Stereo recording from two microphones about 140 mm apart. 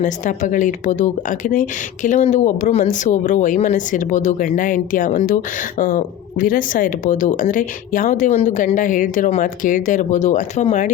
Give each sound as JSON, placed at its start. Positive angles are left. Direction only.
{"t": 0.0, "sound": "speech", "side_deg": 65}